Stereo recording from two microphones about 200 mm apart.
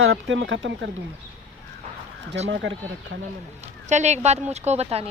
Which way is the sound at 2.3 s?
60° right (ahead or behind).